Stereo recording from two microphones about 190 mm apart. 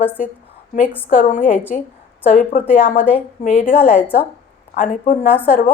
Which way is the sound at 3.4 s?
40° left (ahead or behind).